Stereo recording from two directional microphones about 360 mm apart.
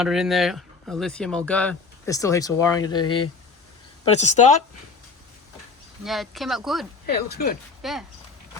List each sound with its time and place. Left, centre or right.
0.0 s speech: centre
6.0 s speech: centre
7.1 s speech: left
7.8 s speech: centre